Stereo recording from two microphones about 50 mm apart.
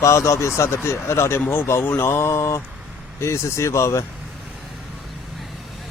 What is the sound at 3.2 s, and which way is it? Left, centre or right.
Speech, left.